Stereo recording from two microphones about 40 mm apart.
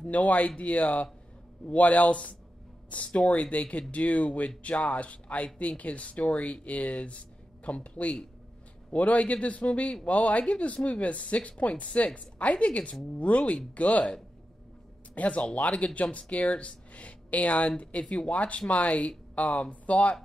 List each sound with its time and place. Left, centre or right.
0.0 s speech: left
15.1 s speech: left